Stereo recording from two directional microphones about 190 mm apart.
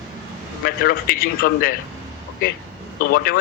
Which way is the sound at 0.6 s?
55° left (ahead or behind).